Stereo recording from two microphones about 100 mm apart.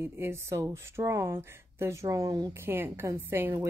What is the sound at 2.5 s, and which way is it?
A woman's voice, 20° right (ahead or behind).